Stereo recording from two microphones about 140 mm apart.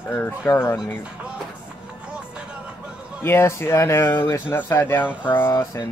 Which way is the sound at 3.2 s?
20° left (ahead or behind).